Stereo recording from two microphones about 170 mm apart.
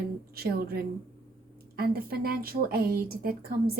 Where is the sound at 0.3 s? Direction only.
65° right (ahead or behind).